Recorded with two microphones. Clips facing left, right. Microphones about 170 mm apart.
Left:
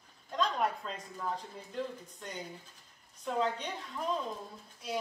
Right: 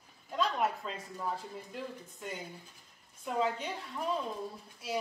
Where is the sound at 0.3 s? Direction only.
5° right (ahead or behind).